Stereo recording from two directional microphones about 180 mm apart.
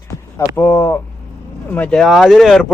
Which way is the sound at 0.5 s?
15° left (ahead or behind).